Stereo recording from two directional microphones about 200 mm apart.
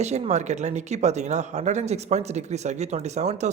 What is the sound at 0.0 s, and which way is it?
Speech, 35° right (ahead or behind).